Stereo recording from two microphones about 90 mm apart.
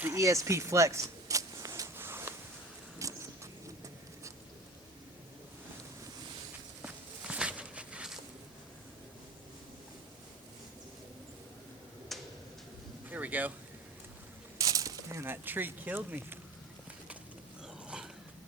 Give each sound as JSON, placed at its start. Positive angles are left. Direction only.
{"t": 0.1, "sound": "speech", "side_deg": -35}
{"t": 2.0, "sound": "a sound", "side_deg": -25}
{"t": 6.8, "sound": "walk", "side_deg": -10}
{"t": 12.1, "sound": "tick-tock", "side_deg": 0}
{"t": 13.1, "sound": "vehicle", "side_deg": -20}
{"t": 14.6, "sound": "speech", "side_deg": -40}
{"t": 17.8, "sound": "dog", "side_deg": -10}